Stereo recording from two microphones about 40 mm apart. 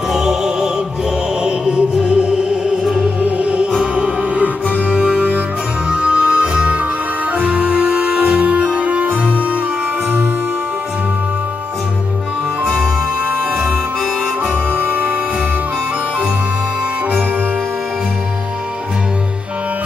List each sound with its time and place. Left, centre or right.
0.1 s music: centre
3.2 s music: right
12.6 s music: centre
14.7 s music: right